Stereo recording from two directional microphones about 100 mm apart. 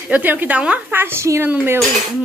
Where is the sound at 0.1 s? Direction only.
20° right (ahead or behind).